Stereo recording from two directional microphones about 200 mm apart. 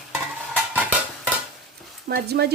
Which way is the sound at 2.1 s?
55° right (ahead or behind).